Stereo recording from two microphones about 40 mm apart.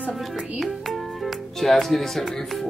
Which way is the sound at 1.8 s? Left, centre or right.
Centre.